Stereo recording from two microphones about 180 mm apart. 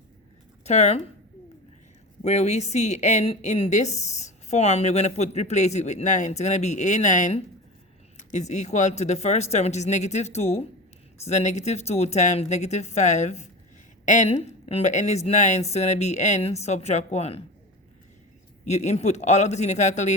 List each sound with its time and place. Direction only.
0.6 s a woman's voice: 40° left (ahead or behind)
2.2 s a woman's voice: 35° left (ahead or behind)
18.6 s a woman's voice: 40° left (ahead or behind)